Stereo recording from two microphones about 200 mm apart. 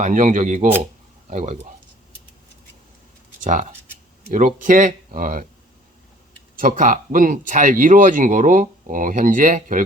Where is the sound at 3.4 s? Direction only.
40° right (ahead or behind).